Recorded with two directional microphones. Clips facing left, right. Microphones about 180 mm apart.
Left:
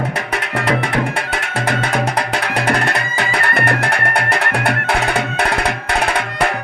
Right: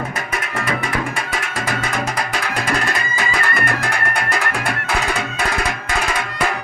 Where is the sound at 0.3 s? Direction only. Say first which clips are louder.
Left 5 dB; 70° left (ahead or behind).